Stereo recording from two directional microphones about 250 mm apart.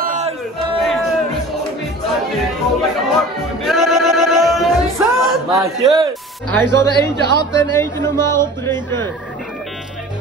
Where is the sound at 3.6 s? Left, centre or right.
Centre.